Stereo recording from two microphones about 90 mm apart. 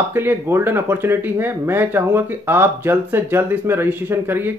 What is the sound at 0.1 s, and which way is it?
Speech, 25° right (ahead or behind).